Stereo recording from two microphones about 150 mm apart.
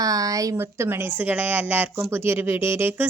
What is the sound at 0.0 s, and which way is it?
A woman's voice, 25° right (ahead or behind).